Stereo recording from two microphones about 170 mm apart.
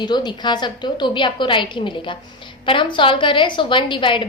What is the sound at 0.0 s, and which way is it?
A woman's voice, 25° left (ahead or behind).